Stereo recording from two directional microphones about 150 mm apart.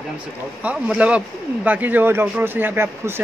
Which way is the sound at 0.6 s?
10° right (ahead or behind).